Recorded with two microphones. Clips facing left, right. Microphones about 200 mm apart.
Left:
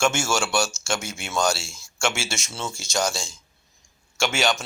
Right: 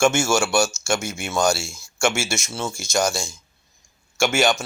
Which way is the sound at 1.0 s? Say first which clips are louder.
Right 5 dB; 50° right (ahead or behind).